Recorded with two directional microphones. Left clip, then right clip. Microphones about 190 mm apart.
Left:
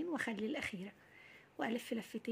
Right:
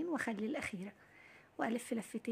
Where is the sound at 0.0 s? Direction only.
20° right (ahead or behind).